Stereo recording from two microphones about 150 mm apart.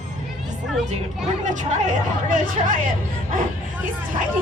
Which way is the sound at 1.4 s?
55° right (ahead or behind).